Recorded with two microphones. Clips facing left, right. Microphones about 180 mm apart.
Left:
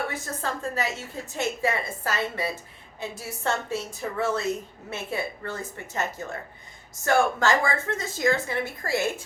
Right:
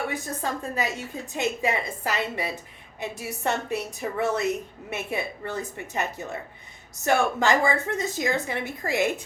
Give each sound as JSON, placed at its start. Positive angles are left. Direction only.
{"t": 0.1, "sound": "a woman's voice", "side_deg": -15}